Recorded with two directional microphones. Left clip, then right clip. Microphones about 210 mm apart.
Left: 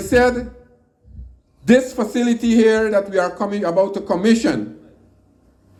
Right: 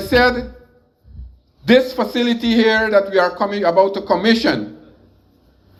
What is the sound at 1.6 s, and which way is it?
Speech, 70° left (ahead or behind).